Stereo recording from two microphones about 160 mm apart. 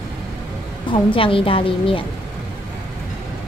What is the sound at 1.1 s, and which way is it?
Speech, 35° left (ahead or behind).